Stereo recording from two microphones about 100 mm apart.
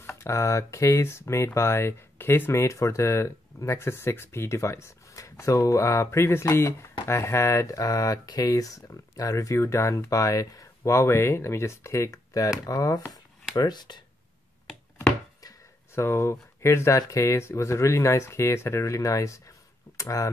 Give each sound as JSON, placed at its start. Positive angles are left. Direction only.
{"t": 0.2, "sound": "speech", "side_deg": 30}
{"t": 15.9, "sound": "speech", "side_deg": 25}